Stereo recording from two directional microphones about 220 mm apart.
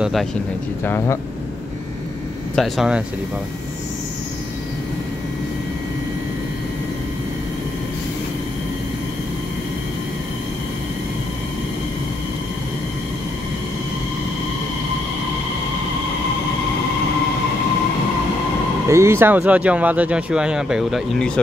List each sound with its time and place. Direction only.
0.0 s speech: centre (ahead or behind)
0.8 s speech: 10° left (ahead or behind)
2.5 s speech: centre (ahead or behind)
18.9 s speech: 10° right (ahead or behind)